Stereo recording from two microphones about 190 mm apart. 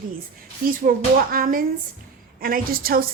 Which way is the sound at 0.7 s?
50° right (ahead or behind).